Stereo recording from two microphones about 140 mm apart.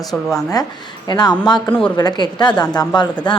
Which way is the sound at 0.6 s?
25° left (ahead or behind).